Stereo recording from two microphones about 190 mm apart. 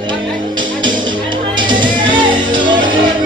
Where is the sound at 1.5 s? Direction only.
25° right (ahead or behind).